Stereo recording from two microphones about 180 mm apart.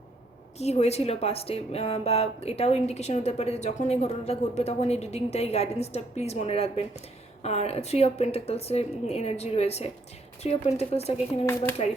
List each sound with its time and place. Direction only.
0.6 s speech: 35° left (ahead or behind)